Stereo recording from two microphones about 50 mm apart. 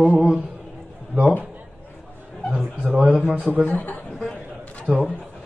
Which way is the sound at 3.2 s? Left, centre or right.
Right.